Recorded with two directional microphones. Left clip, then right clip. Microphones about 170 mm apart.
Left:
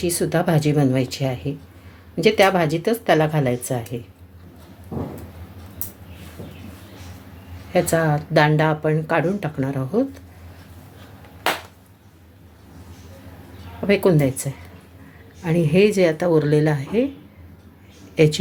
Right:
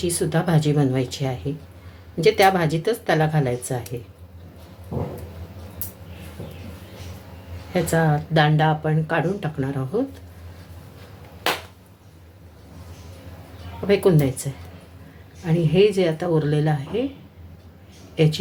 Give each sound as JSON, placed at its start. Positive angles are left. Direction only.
{"t": 0.0, "sound": "speech", "side_deg": 30}
{"t": 7.7, "sound": "speech", "side_deg": 30}
{"t": 13.8, "sound": "a woman's voice", "side_deg": 25}
{"t": 18.1, "sound": "speech", "side_deg": 35}